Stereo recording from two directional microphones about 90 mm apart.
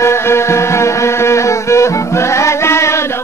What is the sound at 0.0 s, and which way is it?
Music, 30° left (ahead or behind).